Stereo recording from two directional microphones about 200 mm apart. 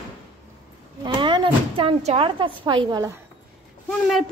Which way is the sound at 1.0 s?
25° right (ahead or behind).